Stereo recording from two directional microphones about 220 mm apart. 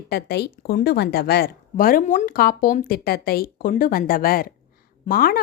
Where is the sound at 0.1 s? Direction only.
45° left (ahead or behind).